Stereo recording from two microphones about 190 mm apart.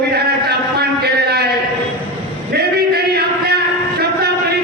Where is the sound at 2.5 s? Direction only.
55° right (ahead or behind).